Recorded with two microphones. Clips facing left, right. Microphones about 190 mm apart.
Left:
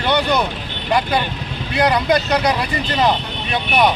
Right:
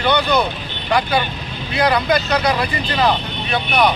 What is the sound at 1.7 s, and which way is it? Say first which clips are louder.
Speech: left 1 dB; 20° left (ahead or behind).